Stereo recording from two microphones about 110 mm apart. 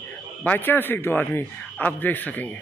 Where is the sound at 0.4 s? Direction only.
20° left (ahead or behind).